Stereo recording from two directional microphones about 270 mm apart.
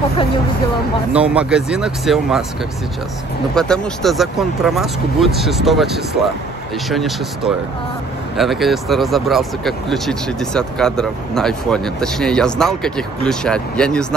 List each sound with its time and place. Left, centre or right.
1.1 s speech: centre
3.5 s speech: centre